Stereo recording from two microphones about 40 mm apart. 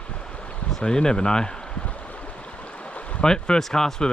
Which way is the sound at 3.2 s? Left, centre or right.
Centre.